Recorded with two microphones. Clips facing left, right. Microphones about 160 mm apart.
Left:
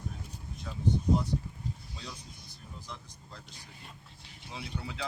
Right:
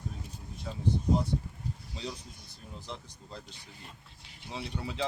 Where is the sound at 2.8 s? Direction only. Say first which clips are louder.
Right 3 dB; 25° right (ahead or behind).